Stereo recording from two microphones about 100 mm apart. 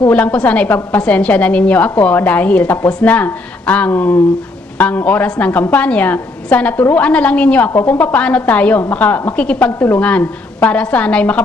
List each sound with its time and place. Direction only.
0.0 s a woman's voice: 15° left (ahead or behind)